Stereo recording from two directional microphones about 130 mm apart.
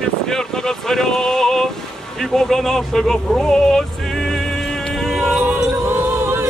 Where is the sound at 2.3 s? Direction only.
5° left (ahead or behind).